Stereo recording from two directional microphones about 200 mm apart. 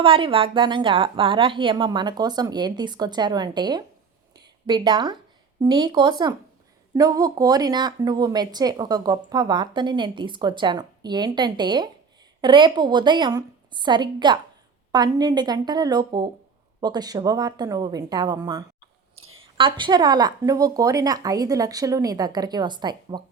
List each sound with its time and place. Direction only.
0.0 s speech: 25° right (ahead or behind)